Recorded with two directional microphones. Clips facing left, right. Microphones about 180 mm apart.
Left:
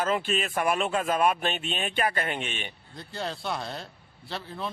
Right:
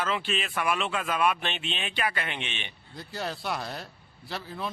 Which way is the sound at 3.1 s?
25° left (ahead or behind).